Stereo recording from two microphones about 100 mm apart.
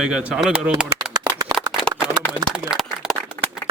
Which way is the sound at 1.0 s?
40° right (ahead or behind).